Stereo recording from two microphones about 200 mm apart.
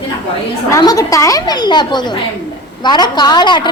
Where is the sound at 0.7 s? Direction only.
15° left (ahead or behind).